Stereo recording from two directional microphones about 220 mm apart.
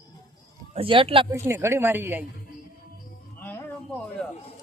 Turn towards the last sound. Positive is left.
turn(degrees=10)  # may be behind; listen again after turning